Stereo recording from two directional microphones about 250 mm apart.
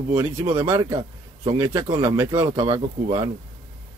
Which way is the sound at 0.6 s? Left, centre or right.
Centre.